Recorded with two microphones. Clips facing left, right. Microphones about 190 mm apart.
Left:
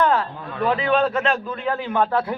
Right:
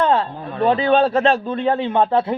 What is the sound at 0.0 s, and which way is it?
A man's voice, 25° right (ahead or behind).